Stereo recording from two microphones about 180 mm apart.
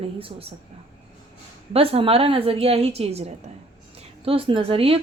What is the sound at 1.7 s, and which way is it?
Speech, 30° right (ahead or behind).